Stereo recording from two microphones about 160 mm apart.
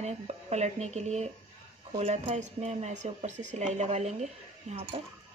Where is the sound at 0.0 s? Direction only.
45° right (ahead or behind).